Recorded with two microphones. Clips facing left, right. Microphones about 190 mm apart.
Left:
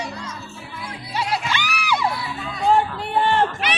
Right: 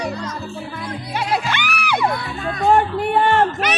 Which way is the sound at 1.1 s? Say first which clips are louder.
Right 2 dB; 55° right (ahead or behind).